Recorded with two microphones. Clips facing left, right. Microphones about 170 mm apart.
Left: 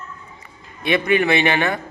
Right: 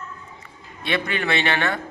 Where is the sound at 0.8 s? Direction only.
15° left (ahead or behind).